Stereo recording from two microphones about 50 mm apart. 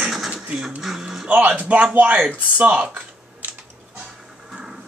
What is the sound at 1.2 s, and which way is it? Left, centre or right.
Speech, right.